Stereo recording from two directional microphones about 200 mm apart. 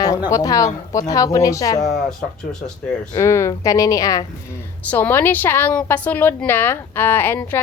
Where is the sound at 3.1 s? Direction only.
15° left (ahead or behind).